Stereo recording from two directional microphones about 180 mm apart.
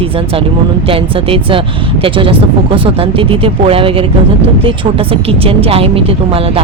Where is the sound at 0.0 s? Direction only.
30° right (ahead or behind).